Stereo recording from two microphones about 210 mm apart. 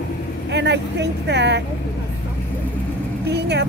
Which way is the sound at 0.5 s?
55° right (ahead or behind).